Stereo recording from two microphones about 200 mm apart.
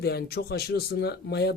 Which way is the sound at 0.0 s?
55° left (ahead or behind).